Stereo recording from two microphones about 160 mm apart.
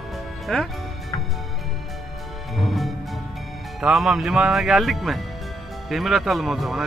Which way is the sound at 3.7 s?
Centre (ahead or behind).